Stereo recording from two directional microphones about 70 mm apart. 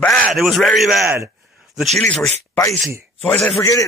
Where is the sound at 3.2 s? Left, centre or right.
Centre.